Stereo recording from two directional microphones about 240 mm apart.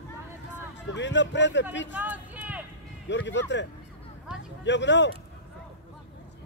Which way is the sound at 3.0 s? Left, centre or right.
Left.